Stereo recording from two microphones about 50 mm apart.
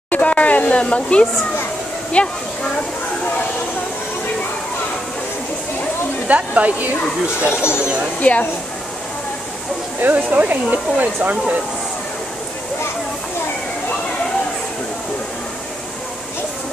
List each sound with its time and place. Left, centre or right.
0.1 s a sound: left
2.1 s speech: left
6.2 s speech: right
8.2 s speech: left
10.0 s speech: right